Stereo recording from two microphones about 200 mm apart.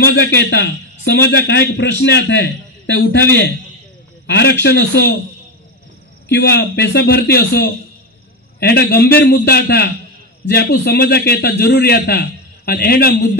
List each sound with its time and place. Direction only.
0.0 s a sound: 55° left (ahead or behind)
0.4 s a man's voice: 60° left (ahead or behind)
4.3 s a man's voice: 55° left (ahead or behind)
6.2 s a man's voice: 55° left (ahead or behind)